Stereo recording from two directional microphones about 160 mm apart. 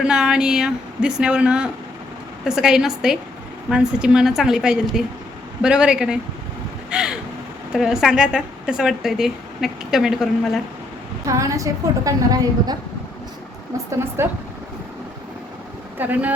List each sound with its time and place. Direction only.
0.0 s speech: 5° right (ahead or behind)
6.9 s a sound: 5° right (ahead or behind)
7.7 s speech: 5° right (ahead or behind)
11.3 s a woman's voice: 20° right (ahead or behind)
14.2 s speech: 15° right (ahead or behind)
16.0 s speech: 10° right (ahead or behind)